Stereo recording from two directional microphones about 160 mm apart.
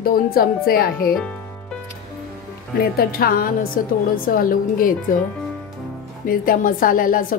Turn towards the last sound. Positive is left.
turn(degrees=60)  # may be behind; listen again after turning